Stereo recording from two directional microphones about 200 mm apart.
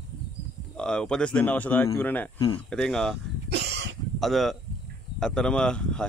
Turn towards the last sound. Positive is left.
turn(degrees=5)  # may be behind; listen again after turning